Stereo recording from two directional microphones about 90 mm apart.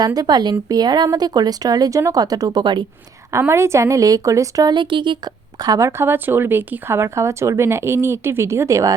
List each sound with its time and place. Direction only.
0.0 s speech: 45° right (ahead or behind)
3.3 s a woman's voice: 30° right (ahead or behind)
4.7 s speech: 65° right (ahead or behind)
5.6 s speech: 35° right (ahead or behind)